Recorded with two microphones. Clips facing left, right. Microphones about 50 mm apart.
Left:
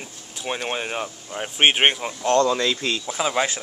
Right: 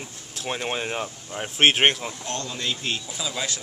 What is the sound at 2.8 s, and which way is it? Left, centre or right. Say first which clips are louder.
Speech: left 4 dB; left.